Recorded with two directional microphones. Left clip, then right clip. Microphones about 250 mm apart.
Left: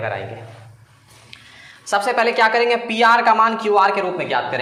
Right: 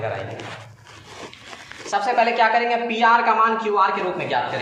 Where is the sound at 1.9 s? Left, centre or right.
Left.